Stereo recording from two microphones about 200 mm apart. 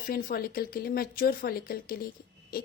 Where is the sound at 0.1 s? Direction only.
45° left (ahead or behind).